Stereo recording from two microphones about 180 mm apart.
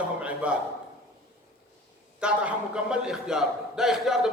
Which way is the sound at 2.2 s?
5° right (ahead or behind).